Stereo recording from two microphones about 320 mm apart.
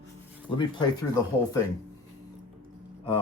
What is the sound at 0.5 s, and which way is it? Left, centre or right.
Speech, centre.